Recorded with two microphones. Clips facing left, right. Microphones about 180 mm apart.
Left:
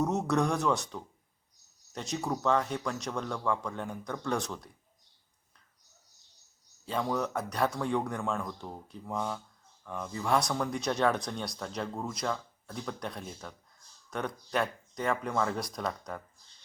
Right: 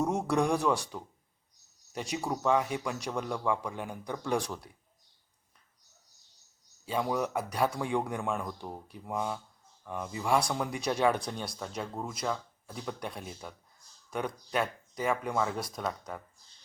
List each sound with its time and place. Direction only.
0.0 s speech: 10° right (ahead or behind)
6.8 s speech: 10° right (ahead or behind)